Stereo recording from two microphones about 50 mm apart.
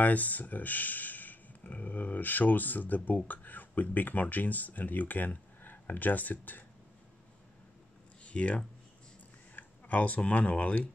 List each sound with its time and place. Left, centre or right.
0.0 s speech: left
8.2 s a sound: left
9.6 s speech: left